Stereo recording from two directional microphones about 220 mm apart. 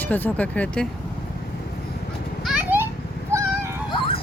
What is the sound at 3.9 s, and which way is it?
Music, 25° left (ahead or behind).